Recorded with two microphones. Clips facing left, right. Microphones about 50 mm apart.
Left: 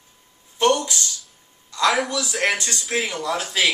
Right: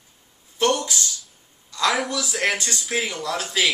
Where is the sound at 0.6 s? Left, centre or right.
Centre.